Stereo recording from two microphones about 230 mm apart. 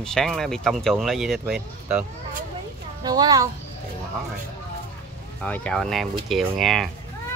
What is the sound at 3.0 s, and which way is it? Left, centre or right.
Speech, centre.